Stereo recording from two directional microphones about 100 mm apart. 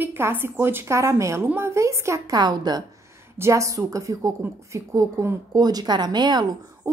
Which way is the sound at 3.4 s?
30° right (ahead or behind).